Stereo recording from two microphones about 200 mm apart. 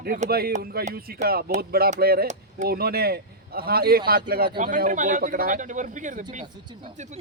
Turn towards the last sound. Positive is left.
turn(degrees=-35)  # may be behind; listen again after turning